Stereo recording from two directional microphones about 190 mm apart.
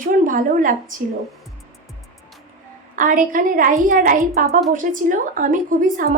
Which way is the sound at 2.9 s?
45° right (ahead or behind).